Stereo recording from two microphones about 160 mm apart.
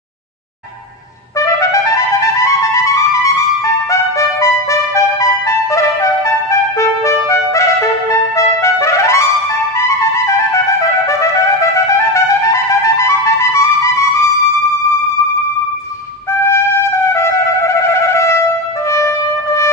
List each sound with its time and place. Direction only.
1.4 s trumpet: 20° left (ahead or behind)
3.6 s music: 20° left (ahead or behind)
5.7 s trumpet: 20° left (ahead or behind)
16.4 s trumpet: 15° left (ahead or behind)
18.9 s music: 15° left (ahead or behind)